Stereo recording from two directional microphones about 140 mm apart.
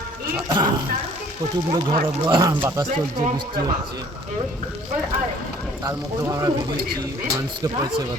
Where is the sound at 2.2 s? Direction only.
30° right (ahead or behind).